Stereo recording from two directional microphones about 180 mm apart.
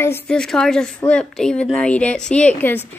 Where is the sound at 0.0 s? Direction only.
10° left (ahead or behind).